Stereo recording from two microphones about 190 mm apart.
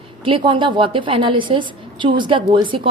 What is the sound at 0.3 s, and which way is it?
A woman's voice, 25° right (ahead or behind).